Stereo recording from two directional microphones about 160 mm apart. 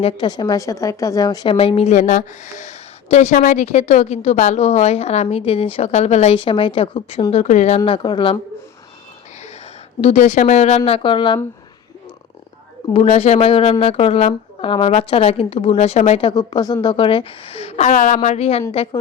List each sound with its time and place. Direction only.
0.0 s a woman's voice: 30° left (ahead or behind)
1.5 s speech: 40° left (ahead or behind)
7.9 s speech: 30° left (ahead or behind)
10.0 s speech: 45° left (ahead or behind)
12.9 s speech: 40° left (ahead or behind)
16.3 s speech: 25° left (ahead or behind)